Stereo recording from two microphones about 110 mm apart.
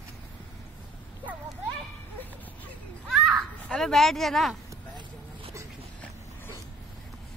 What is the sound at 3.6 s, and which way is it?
Speech, 5° left (ahead or behind).